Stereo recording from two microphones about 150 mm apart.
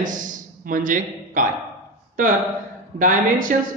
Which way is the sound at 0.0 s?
60° right (ahead or behind).